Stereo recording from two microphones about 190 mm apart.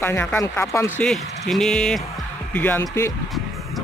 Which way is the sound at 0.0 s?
10° left (ahead or behind).